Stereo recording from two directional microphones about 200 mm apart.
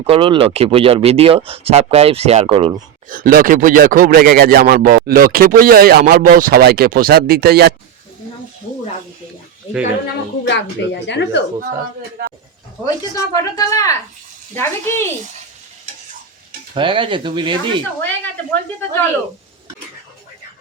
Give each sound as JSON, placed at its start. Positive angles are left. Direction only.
{"t": 0.0, "sound": "speech", "side_deg": -25}
{"t": 3.1, "sound": "speech", "side_deg": -45}
{"t": 10.4, "sound": "a woman's voice", "side_deg": 60}
{"t": 12.8, "sound": "speech", "side_deg": 15}
{"t": 16.7, "sound": "speech", "side_deg": -25}